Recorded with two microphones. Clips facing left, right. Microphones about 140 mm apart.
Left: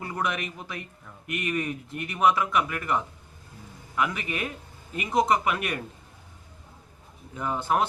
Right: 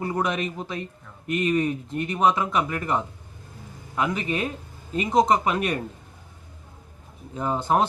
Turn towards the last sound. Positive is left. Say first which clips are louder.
# right 3 dB
turn(degrees=-30)  # may be behind; listen again after turning